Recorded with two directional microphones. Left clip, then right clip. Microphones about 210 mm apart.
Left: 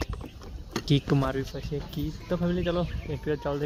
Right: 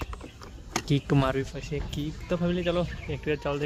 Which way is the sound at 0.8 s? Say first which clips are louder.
Even; 10° left (ahead or behind).